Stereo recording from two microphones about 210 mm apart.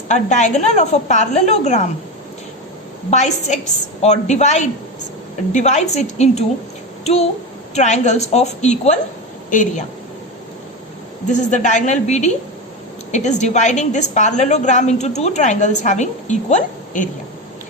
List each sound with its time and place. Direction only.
0.1 s a woman's voice: 35° left (ahead or behind)
3.1 s a woman's voice: 35° left (ahead or behind)
11.3 s a woman's voice: 35° left (ahead or behind)